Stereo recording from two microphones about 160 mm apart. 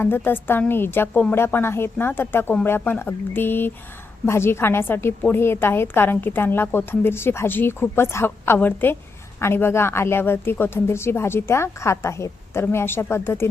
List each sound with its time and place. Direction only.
0.0 s a woman's voice: 15° left (ahead or behind)